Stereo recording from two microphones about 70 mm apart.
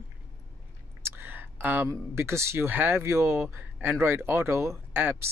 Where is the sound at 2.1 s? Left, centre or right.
Right.